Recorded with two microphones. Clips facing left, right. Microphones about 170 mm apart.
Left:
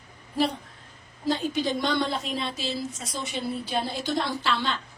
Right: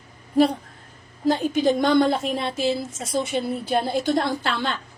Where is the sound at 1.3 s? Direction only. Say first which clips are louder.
Right 6 dB; 50° right (ahead or behind).